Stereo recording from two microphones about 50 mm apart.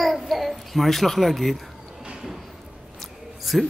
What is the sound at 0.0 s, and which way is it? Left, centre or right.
Babbling, centre.